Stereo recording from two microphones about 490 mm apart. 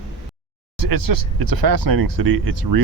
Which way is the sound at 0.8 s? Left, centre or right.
Right.